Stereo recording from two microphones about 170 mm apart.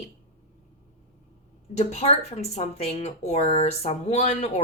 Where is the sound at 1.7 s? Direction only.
40° left (ahead or behind).